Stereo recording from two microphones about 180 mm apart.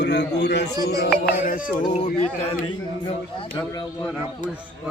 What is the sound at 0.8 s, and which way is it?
Music, 65° left (ahead or behind).